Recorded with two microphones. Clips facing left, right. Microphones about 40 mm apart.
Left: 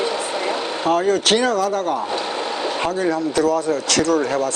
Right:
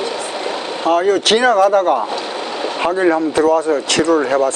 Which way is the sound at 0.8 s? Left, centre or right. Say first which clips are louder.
Right 4 dB; right.